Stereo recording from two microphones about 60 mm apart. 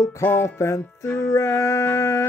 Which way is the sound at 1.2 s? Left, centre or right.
Left.